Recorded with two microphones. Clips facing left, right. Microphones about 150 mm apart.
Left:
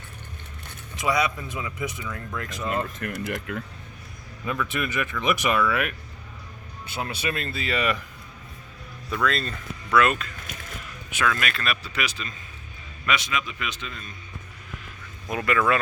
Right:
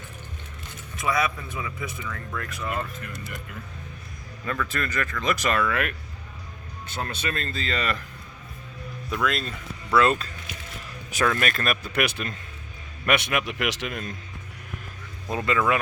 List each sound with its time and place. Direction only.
1.0 s speech: 15° left (ahead or behind)
3.0 s speech: 60° left (ahead or behind)
4.4 s speech: 10° left (ahead or behind)
9.0 s speech: 5° right (ahead or behind)
9.9 s speech: 30° right (ahead or behind); by 14.1 s 80° right
15.3 s speech: 20° right (ahead or behind)